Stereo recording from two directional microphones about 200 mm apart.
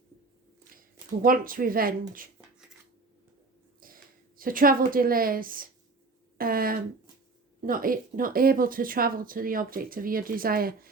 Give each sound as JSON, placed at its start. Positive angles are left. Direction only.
{"t": 1.2, "sound": "speech", "side_deg": -45}
{"t": 3.8, "sound": "a woman's voice", "side_deg": -45}